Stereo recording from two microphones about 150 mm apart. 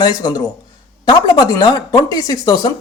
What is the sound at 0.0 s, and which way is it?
Speech, 30° left (ahead or behind).